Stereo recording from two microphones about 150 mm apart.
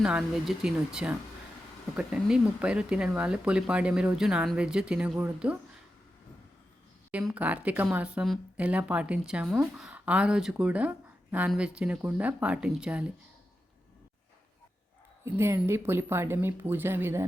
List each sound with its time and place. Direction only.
0.0 s speech: 5° right (ahead or behind)
7.3 s speech: 10° right (ahead or behind)
15.2 s speech: 15° right (ahead or behind)